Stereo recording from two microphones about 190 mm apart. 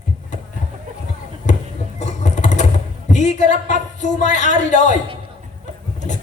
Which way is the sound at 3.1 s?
40° left (ahead or behind).